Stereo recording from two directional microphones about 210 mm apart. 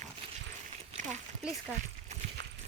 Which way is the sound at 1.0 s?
35° right (ahead or behind).